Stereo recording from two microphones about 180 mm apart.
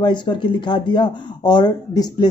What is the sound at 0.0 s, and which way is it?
Speech, 25° left (ahead or behind).